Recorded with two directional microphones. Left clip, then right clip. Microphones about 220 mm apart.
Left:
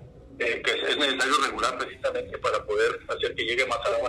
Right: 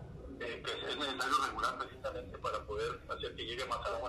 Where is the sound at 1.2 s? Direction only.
90° left.